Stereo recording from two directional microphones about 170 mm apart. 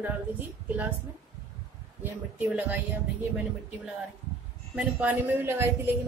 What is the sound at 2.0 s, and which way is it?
Speech, 10° right (ahead or behind).